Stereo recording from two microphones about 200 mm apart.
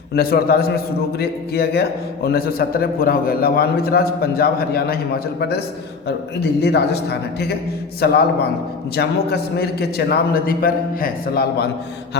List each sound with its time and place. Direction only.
0.1 s a man's voice: 50° left (ahead or behind)